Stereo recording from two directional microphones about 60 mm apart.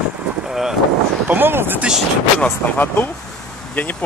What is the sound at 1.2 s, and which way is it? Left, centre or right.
Speech, right.